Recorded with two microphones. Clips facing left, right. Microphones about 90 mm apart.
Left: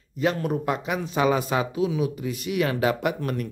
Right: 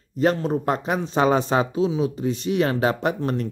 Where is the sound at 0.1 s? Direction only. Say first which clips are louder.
Right 4 dB; 40° right (ahead or behind).